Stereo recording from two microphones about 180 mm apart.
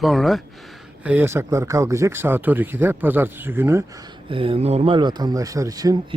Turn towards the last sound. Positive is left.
turn(degrees=-25)  # may be behind; listen again after turning